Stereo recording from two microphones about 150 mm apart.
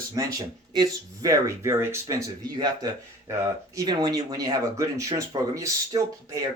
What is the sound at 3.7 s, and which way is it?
Speech, 25° right (ahead or behind).